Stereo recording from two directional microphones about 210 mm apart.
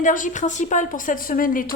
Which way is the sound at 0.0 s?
40° left (ahead or behind).